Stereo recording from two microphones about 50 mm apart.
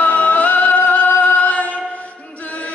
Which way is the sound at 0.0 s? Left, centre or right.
Left.